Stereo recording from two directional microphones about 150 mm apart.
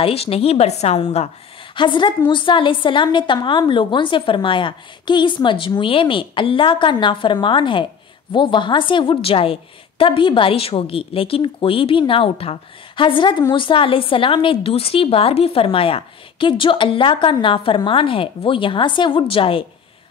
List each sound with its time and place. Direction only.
0.0 s a woman's voice: 40° left (ahead or behind)
1.8 s a woman's voice: 30° left (ahead or behind)